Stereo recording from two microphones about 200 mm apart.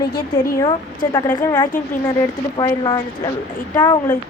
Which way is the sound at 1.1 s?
15° left (ahead or behind).